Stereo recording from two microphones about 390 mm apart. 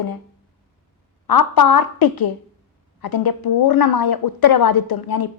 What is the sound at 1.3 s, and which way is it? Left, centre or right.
A woman's voice, left.